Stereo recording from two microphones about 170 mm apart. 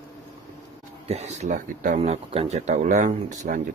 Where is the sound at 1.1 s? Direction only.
40° right (ahead or behind).